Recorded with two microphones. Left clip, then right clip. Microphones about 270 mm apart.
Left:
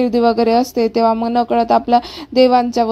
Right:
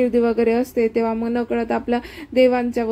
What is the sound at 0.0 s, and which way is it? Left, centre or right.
Speech, left.